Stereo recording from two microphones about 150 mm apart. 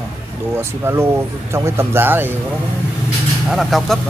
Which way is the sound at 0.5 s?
15° right (ahead or behind).